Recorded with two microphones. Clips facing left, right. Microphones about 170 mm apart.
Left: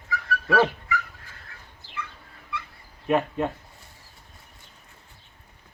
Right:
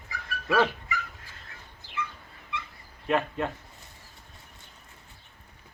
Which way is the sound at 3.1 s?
15° left (ahead or behind).